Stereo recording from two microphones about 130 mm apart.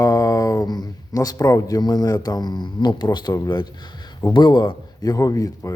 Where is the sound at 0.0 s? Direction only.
25° left (ahead or behind).